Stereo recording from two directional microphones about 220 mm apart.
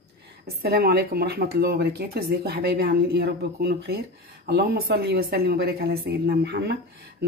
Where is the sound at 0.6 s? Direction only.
45° right (ahead or behind).